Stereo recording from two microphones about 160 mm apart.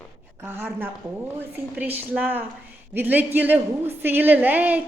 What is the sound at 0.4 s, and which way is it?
A woman's voice, 10° right (ahead or behind).